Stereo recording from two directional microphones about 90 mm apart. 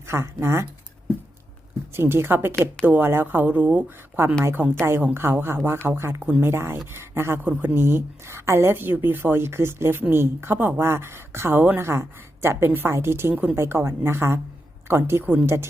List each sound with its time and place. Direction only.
0.1 s a woman's voice: 30° right (ahead or behind)
2.0 s a woman's voice: 25° right (ahead or behind)
13.3 s a woman's voice: 15° right (ahead or behind)
13.6 s a woman's voice: 30° right (ahead or behind)